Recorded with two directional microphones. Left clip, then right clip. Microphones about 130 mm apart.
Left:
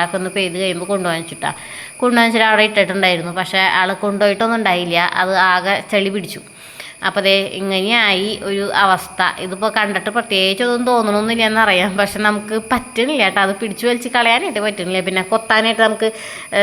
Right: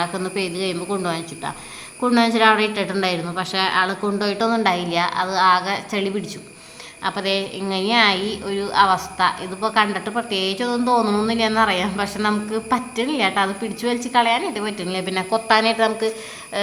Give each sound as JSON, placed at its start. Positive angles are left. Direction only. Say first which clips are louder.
{"t": 0.0, "sound": "a woman's voice", "louder": "left 5 dB", "side_deg": 15}